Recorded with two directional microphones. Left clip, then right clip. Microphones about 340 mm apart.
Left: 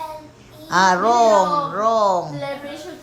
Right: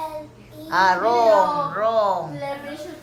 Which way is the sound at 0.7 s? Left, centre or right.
Left.